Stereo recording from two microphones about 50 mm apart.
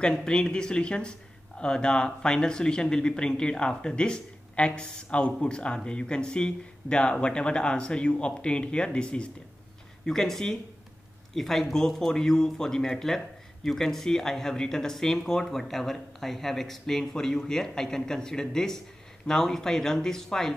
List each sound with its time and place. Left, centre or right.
0.2 s speech: centre
10.0 s speech: centre